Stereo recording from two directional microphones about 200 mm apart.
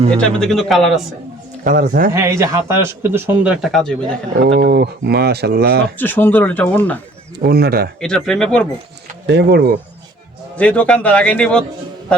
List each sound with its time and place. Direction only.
0.2 s speech: 5° left (ahead or behind)
1.6 s speech: 40° right (ahead or behind)
2.1 s a man's voice: 15° right (ahead or behind); by 4.2 s centre (ahead or behind)
4.4 s speech: 60° right (ahead or behind)
6.0 s speech: 10° left (ahead or behind)
7.3 s speech: 50° right (ahead or behind)
8.0 s speech: 5° left (ahead or behind)
9.2 s speech: 55° right (ahead or behind)
10.6 s speech: 5° left (ahead or behind)